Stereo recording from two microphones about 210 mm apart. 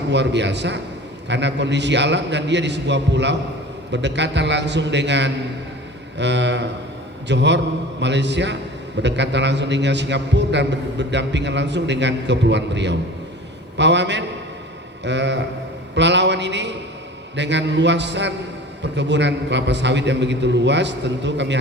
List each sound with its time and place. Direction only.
0.1 s a man's voice: 55° right (ahead or behind)